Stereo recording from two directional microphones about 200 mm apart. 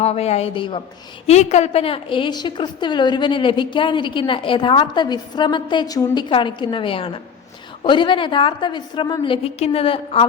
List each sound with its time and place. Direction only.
0.0 s a woman's voice: 30° left (ahead or behind)